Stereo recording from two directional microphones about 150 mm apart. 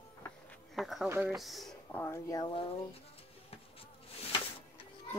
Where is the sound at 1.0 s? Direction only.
15° right (ahead or behind).